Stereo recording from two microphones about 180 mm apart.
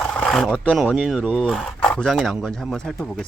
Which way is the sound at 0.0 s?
5° left (ahead or behind).